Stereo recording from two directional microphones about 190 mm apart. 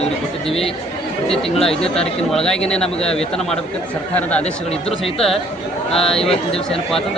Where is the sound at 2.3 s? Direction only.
5° left (ahead or behind).